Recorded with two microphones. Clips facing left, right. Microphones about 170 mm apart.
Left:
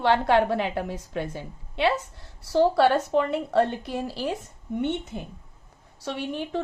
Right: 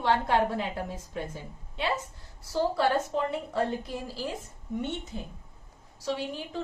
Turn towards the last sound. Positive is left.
turn(degrees=65)  # may be behind; listen again after turning